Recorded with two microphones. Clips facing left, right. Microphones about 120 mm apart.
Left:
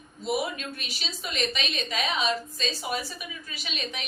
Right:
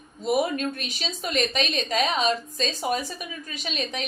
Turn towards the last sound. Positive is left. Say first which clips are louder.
# right 5 dB
turn(degrees=-40)  # may be behind; listen again after turning